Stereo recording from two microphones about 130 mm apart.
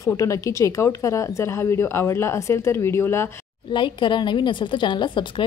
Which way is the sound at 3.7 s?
40° left (ahead or behind).